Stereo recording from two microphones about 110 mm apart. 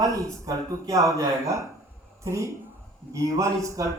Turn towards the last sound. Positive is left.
turn(degrees=-30)  # may be behind; listen again after turning